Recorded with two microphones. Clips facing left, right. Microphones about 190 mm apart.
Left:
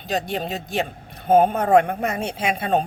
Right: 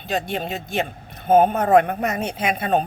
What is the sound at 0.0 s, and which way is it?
A man's voice, 35° left (ahead or behind).